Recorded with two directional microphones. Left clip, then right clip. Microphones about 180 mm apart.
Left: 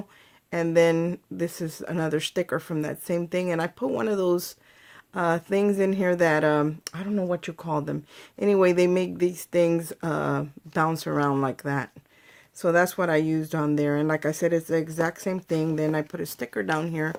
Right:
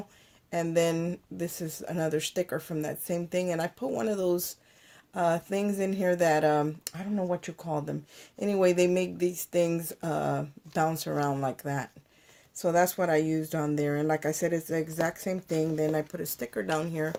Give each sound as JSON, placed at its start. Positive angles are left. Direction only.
{"t": 0.5, "sound": "speech", "side_deg": 45}